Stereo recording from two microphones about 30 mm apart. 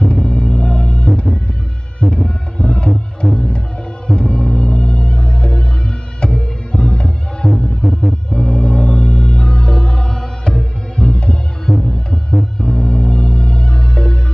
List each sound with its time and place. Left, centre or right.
0.0 s a sound: left
0.7 s music: left
3.2 s music: centre
4.1 s music: left